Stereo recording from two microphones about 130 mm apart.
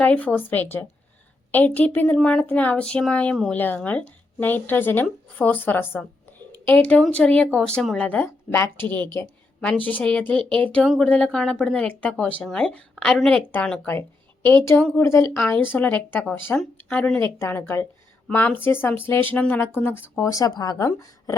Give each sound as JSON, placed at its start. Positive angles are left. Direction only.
{"t": 0.0, "sound": "speech", "side_deg": 10}